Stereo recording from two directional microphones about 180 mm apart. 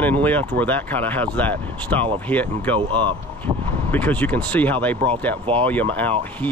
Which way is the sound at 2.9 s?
25° right (ahead or behind).